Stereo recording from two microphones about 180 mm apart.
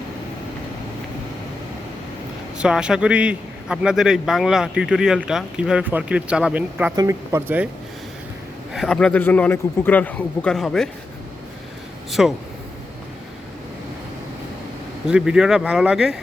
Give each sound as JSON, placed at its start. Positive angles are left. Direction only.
{"t": 2.6, "sound": "a man's voice", "side_deg": -5}
{"t": 6.9, "sound": "speech", "side_deg": -20}
{"t": 8.7, "sound": "a man's voice", "side_deg": 0}
{"t": 12.2, "sound": "a man's voice", "side_deg": 0}
{"t": 15.0, "sound": "a man's voice", "side_deg": -5}